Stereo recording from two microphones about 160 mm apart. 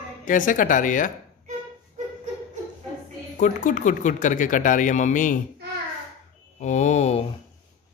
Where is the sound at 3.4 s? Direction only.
55° left (ahead or behind).